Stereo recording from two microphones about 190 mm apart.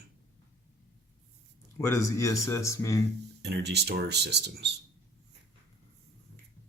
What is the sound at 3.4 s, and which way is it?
Speech, 60° right (ahead or behind).